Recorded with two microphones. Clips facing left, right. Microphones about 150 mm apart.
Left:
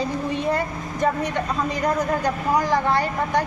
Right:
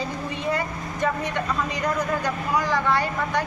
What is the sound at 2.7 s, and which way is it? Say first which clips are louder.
Speech: left 2 dB; 40° left (ahead or behind).